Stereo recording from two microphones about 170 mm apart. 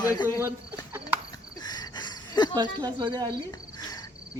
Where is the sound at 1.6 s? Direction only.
25° left (ahead or behind).